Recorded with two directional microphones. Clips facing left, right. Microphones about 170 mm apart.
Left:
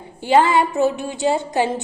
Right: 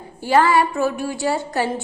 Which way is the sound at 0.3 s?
20° left (ahead or behind).